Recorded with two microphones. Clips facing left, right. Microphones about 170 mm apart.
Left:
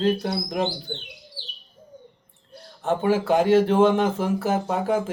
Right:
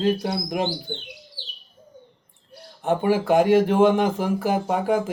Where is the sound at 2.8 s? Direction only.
15° right (ahead or behind).